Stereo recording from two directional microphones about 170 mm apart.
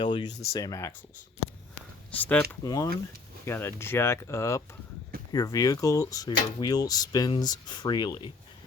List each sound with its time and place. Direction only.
0.0 s speech: 25° left (ahead or behind)
2.1 s speech: 10° left (ahead or behind)
2.6 s speech: 20° left (ahead or behind)